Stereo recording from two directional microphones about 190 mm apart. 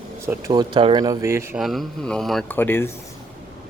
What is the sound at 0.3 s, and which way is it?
Speech, 20° right (ahead or behind).